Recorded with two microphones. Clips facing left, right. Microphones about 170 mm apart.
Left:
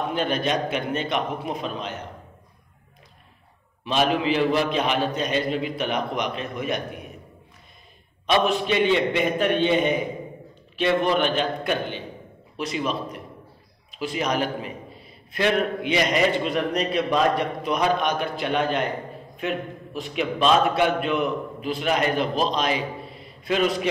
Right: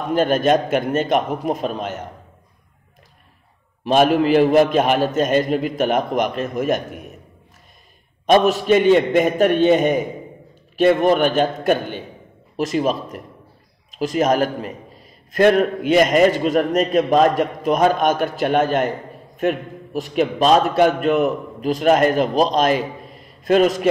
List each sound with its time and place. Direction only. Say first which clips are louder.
0.1 s a man's voice: right 12 dB; 45° right (ahead or behind)
3.8 s a man's voice: right 7 dB; 45° right (ahead or behind)
8.3 s a man's voice: right 7 dB; 45° right (ahead or behind)